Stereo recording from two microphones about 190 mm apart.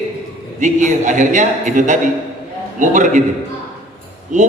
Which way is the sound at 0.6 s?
40° right (ahead or behind).